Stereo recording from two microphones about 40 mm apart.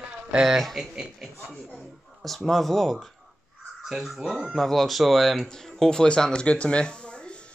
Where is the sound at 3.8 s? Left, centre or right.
Centre.